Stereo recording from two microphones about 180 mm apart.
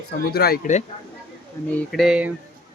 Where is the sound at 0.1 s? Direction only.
60° left (ahead or behind).